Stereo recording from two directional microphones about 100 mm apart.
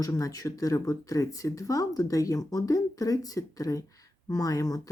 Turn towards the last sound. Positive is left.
turn(degrees=35)  # may be behind; listen again after turning